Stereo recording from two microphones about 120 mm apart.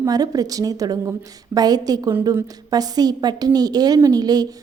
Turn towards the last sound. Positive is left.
turn(degrees=-35)  # may be behind; listen again after turning